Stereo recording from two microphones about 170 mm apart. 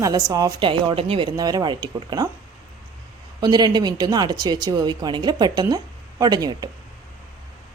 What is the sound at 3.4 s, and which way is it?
Speech, 25° right (ahead or behind).